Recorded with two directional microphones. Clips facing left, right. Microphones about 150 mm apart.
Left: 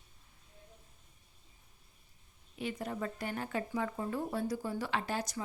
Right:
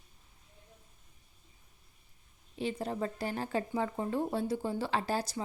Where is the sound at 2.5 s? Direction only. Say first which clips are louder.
Right 3 dB; 30° right (ahead or behind).